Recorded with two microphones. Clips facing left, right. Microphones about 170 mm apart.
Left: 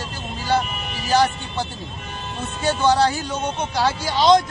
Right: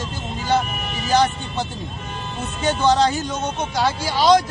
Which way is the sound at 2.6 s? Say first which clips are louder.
Right 1 dB; 15° right (ahead or behind).